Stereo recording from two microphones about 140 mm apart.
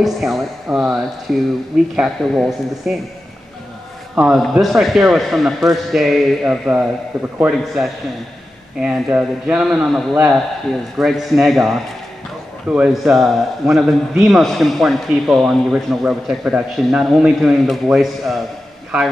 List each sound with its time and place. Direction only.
0.0 s a man's voice: centre (ahead or behind)
4.1 s a man's voice: 5° right (ahead or behind)
7.1 s a man's voice: 25° right (ahead or behind)
7.5 s a man's voice: centre (ahead or behind)